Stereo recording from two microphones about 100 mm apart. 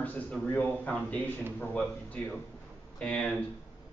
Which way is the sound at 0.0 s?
15° left (ahead or behind).